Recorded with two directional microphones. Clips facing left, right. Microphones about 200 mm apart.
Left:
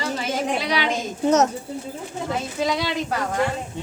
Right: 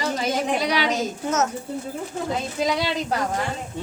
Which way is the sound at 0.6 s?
40° right (ahead or behind).